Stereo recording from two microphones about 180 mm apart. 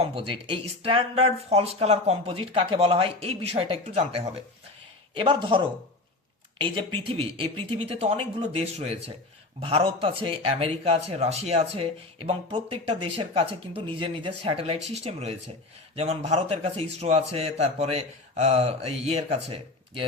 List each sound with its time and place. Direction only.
0.0 s speech: 30° right (ahead or behind)